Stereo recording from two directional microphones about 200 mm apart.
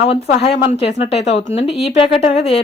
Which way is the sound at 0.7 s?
30° left (ahead or behind).